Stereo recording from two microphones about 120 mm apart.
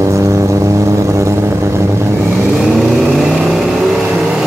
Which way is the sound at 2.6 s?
Centre (ahead or behind).